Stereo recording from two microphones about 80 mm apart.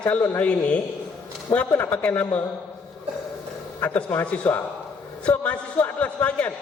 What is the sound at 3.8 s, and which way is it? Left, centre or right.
A man's voice, left.